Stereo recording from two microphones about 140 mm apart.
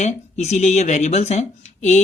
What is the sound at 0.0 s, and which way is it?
Speech, 55° left (ahead or behind).